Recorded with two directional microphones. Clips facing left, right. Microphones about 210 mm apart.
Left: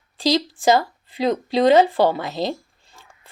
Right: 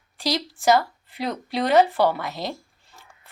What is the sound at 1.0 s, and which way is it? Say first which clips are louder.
Speech: left 7 dB; 90° left.